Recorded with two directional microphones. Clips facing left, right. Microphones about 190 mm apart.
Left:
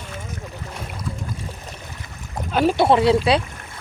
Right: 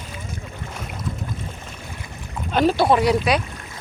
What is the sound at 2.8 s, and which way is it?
Speech, 25° left (ahead or behind).